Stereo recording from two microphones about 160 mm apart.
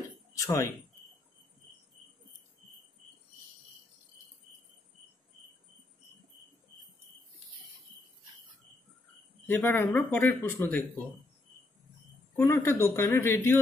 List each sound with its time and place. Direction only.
0.4 s speech: 20° left (ahead or behind)
9.5 s a man's voice: 15° left (ahead or behind)
12.4 s a man's voice: 15° left (ahead or behind)